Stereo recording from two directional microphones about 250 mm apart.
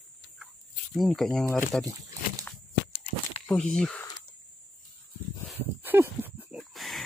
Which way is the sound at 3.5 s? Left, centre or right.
Centre.